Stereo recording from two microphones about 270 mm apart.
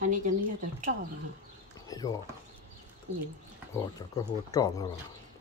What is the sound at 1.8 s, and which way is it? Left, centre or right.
Speech, centre.